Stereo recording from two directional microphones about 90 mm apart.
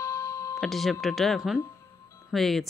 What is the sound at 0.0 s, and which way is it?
Music, 35° left (ahead or behind).